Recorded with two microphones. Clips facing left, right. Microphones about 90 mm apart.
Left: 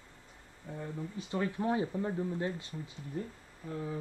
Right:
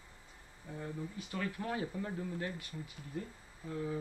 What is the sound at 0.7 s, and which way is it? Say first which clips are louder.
Speech: left 2 dB; 25° left (ahead or behind).